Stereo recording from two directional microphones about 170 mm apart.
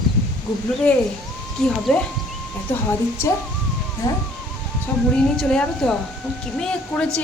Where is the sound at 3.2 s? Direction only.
15° left (ahead or behind).